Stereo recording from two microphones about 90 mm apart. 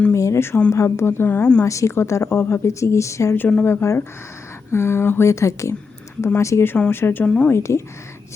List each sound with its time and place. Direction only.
0.1 s speech: 35° left (ahead or behind)
1.6 s speech: 35° left (ahead or behind)
7.3 s a woman's voice: 10° left (ahead or behind)
7.5 s speech: 30° left (ahead or behind)